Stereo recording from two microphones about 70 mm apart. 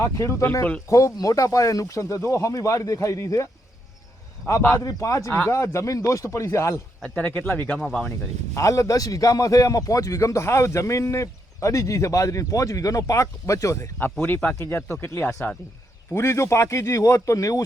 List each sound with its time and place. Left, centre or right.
0.0 s a man's voice: left
4.8 s a man's voice: left
7.2 s speech: left
8.5 s a man's voice: left
14.0 s a man's voice: left